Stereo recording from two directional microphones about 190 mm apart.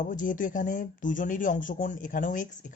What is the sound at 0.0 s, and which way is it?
Speech, 45° left (ahead or behind).